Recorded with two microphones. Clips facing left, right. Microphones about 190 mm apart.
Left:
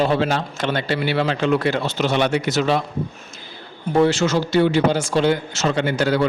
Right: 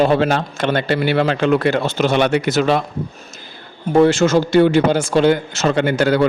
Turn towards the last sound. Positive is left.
turn(degrees=-55)  # may be behind; listen again after turning